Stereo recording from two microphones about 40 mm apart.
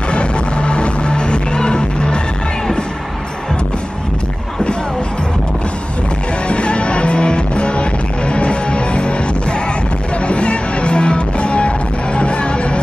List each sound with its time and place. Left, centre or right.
0.1 s music: left
6.4 s music: left